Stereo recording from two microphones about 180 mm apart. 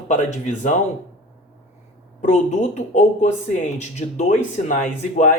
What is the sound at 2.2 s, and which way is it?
Speech, 40° left (ahead or behind).